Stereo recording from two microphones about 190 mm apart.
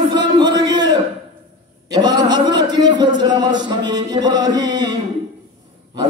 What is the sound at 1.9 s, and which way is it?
A man's voice, 20° right (ahead or behind).